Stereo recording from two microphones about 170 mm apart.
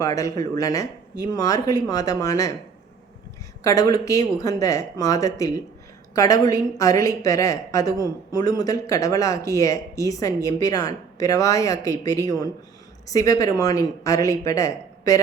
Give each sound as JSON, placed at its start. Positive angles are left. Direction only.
{"t": 0.0, "sound": "a woman's voice", "side_deg": 20}
{"t": 3.6, "sound": "a woman's voice", "side_deg": 20}